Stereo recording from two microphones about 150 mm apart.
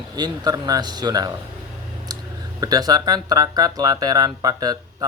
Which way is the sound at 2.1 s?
25° right (ahead or behind).